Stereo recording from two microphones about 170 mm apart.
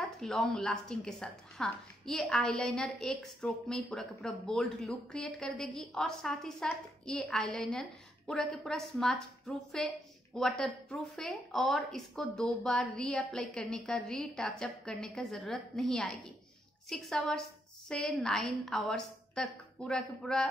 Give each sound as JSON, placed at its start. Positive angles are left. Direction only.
{"t": 0.2, "sound": "speech", "side_deg": 0}